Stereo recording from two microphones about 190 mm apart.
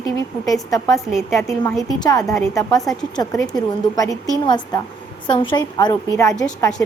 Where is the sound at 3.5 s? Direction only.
20° left (ahead or behind).